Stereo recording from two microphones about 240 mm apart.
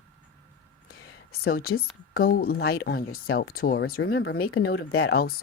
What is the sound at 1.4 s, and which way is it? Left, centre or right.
Speech, left.